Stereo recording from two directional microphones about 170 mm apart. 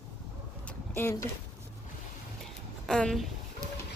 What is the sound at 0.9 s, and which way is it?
Speech, 15° left (ahead or behind).